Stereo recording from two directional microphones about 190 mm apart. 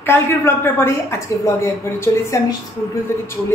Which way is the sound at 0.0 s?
10° left (ahead or behind).